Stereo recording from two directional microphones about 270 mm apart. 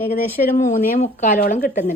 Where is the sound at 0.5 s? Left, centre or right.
Left.